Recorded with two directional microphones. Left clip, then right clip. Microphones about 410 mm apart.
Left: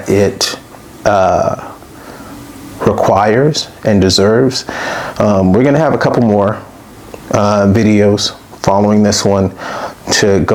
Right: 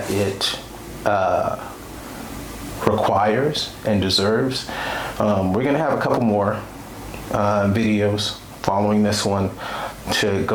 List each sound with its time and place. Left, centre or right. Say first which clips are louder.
0.4 s speech: left 6 dB; left
3.0 s speech: left 9 dB; left